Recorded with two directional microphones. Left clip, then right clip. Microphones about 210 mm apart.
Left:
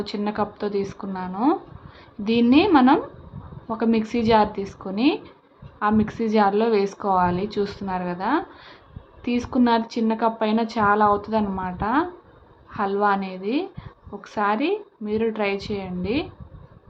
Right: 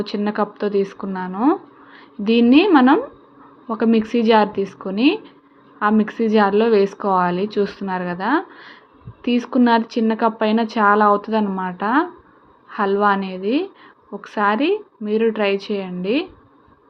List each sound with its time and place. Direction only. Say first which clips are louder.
0.0 s a woman's voice: right 4 dB; 15° right (ahead or behind)